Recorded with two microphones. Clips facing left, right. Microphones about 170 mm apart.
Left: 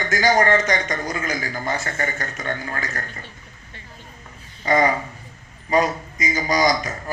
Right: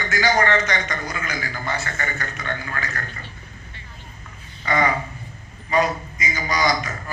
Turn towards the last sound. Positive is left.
turn(degrees=40)  # may be behind; listen again after turning